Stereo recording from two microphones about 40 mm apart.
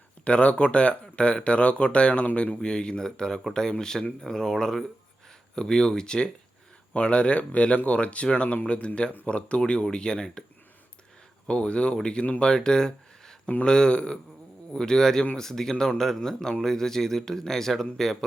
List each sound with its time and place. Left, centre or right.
0.3 s speech: left
2.6 s speech: left
11.4 s speech: left; by 15.7 s centre
15.7 s speech: left
16.0 s speech: centre